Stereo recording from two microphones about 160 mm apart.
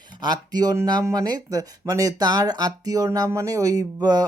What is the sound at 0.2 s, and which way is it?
Speech, 25° right (ahead or behind).